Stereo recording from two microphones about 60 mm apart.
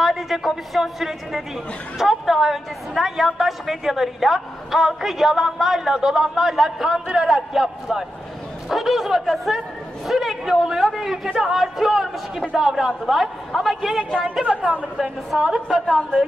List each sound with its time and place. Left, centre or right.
0.0 s a woman's voice: centre; by 14.9 s right
15.0 s a woman's voice: centre